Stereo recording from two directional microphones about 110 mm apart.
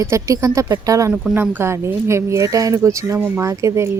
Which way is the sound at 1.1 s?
15° right (ahead or behind).